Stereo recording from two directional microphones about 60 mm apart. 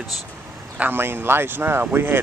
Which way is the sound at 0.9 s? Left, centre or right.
Right.